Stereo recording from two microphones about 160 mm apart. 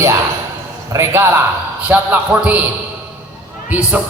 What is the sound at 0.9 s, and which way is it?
A man's voice, 15° right (ahead or behind).